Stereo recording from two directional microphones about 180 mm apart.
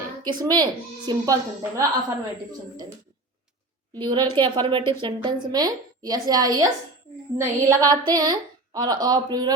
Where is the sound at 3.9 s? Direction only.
25° right (ahead or behind).